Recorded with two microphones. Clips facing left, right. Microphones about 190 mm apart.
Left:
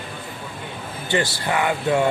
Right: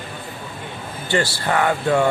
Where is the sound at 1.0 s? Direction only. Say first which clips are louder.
Right 2 dB; 20° left (ahead or behind).